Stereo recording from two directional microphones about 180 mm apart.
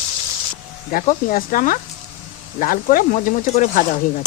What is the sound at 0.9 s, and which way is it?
Speech, 55° left (ahead or behind).